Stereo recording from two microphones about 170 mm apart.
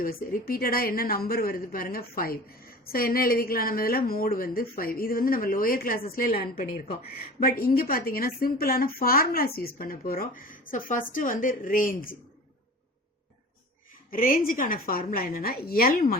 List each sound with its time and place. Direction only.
0.0 s speech: 55° left (ahead or behind)
14.1 s speech: 55° left (ahead or behind)